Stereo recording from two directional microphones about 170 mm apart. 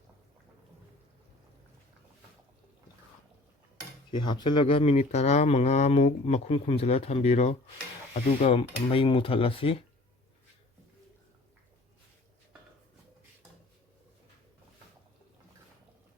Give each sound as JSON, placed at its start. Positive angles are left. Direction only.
{"t": 4.1, "sound": "speech", "side_deg": 25}